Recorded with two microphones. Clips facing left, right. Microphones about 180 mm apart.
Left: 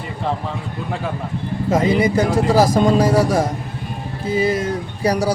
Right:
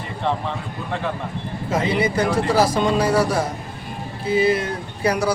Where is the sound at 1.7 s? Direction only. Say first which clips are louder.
Left 4 dB; 45° left (ahead or behind).